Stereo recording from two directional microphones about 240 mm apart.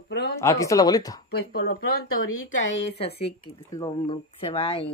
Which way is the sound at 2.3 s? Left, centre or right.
Left.